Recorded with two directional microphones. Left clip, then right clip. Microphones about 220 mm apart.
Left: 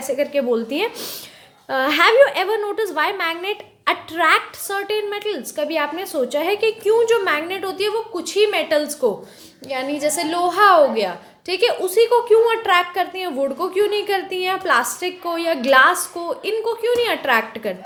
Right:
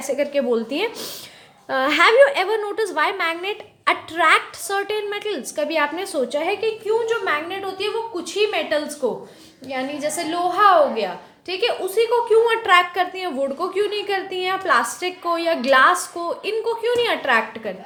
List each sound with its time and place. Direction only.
0.0 s a woman's voice: centre (ahead or behind)
6.2 s a woman's voice: 15° left (ahead or behind)
6.8 s a woman's voice: 45° left (ahead or behind)
12.3 s a woman's voice: 5° left (ahead or behind)